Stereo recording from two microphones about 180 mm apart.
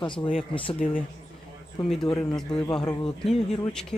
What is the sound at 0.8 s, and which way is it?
Speech, 45° left (ahead or behind).